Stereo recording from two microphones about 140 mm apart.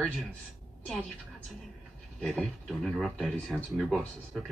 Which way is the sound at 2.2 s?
Centre (ahead or behind).